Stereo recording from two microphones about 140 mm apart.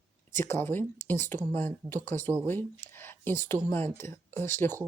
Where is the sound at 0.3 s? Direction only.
15° left (ahead or behind).